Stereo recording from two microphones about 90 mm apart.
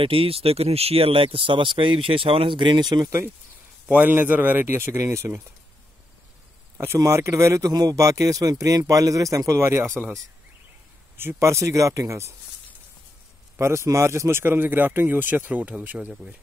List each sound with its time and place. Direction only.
0.0 s speech: 90° right; by 3.1 s 50° right (ahead or behind)
3.8 s speech: 25° right (ahead or behind)
7.0 s speech: 35° right (ahead or behind)
11.1 s speech: 30° right (ahead or behind)
13.6 s speech: 35° right (ahead or behind)